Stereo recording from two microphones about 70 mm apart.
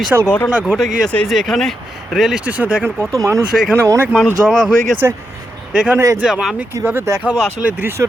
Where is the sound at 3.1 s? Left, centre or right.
Right.